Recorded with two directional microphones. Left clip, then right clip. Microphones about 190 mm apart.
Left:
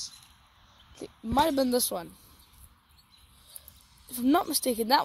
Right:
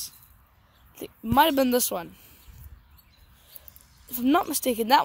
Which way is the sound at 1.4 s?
Centre (ahead or behind).